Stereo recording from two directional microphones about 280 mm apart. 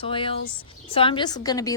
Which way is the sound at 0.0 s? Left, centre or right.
Centre.